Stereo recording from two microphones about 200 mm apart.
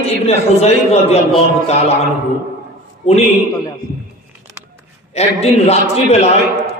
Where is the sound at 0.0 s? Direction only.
30° left (ahead or behind).